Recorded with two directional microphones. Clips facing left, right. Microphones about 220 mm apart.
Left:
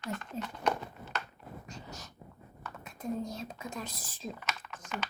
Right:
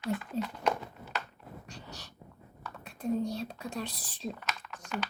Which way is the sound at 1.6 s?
35° right (ahead or behind).